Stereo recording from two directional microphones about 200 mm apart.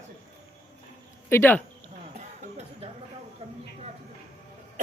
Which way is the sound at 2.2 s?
35° right (ahead or behind).